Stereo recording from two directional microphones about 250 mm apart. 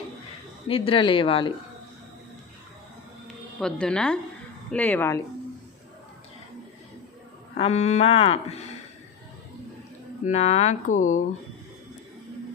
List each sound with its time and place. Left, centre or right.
0.7 s speech: left
3.6 s a woman's voice: centre
7.5 s speech: left
10.2 s speech: left